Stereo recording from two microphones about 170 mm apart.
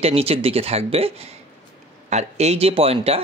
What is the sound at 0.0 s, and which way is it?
Speech, 35° right (ahead or behind).